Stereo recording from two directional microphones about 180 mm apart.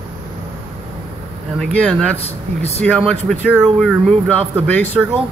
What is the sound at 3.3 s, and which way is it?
Speech, centre (ahead or behind).